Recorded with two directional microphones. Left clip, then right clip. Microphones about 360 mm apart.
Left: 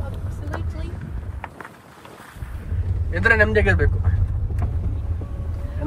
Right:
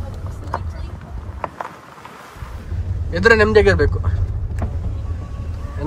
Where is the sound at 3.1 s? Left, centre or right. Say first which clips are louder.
Right 5 dB; centre.